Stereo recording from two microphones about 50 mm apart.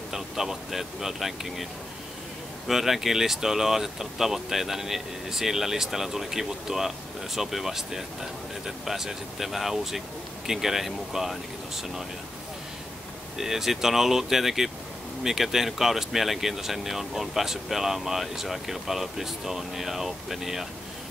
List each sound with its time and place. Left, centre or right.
0.1 s speech: centre
2.7 s speech: centre
13.4 s speech: centre